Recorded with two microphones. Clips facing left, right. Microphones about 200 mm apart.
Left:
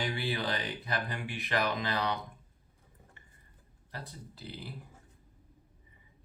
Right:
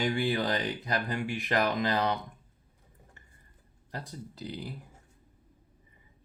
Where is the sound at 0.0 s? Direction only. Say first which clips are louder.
Right 5 dB; 45° right (ahead or behind).